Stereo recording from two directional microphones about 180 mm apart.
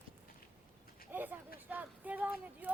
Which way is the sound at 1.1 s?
10° right (ahead or behind).